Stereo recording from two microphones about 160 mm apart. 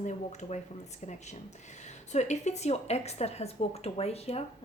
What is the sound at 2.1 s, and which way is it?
A woman's voice, 45° left (ahead or behind).